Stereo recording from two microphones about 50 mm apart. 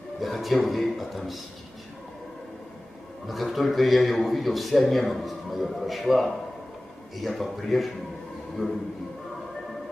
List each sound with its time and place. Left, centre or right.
0.2 s a man's voice: centre
3.3 s a man's voice: centre